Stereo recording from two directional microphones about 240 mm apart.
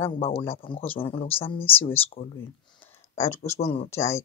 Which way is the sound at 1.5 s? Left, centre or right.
Centre.